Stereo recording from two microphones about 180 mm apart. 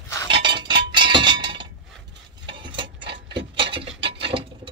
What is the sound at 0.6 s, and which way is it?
Chink, 25° right (ahead or behind).